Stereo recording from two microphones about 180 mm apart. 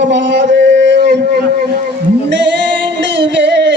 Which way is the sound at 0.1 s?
80° right.